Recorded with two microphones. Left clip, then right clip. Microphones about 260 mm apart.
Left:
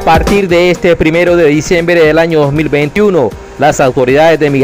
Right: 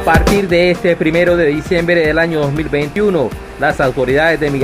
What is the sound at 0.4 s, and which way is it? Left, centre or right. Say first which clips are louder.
Speech: left 4 dB; left.